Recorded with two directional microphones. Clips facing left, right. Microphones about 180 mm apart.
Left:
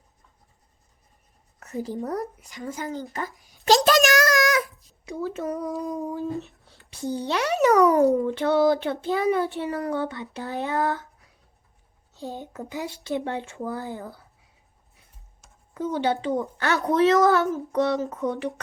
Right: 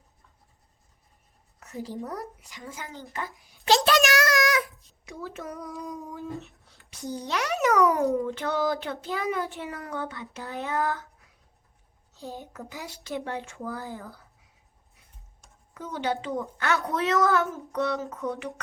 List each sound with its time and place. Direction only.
2.0 s speech: 45° left (ahead or behind)
2.4 s a sound: 45° left (ahead or behind)
4.7 s a sound: centre (ahead or behind)
5.0 s a woman's voice: 30° left (ahead or behind)
12.3 s speech: 20° left (ahead or behind)
15.7 s a woman's voice: 30° left (ahead or behind)